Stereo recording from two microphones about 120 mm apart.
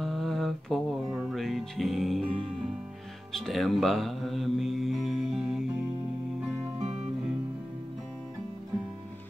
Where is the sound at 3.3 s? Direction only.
Centre (ahead or behind).